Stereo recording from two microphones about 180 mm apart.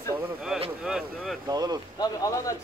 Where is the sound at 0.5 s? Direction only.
Centre (ahead or behind).